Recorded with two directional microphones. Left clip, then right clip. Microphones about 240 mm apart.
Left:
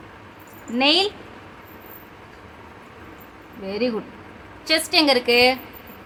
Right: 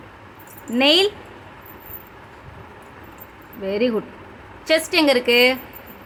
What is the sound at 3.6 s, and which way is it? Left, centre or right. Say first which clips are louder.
A woman's voice: right 4 dB; centre.